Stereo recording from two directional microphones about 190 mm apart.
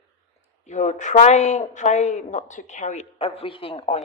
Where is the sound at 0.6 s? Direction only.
40° left (ahead or behind).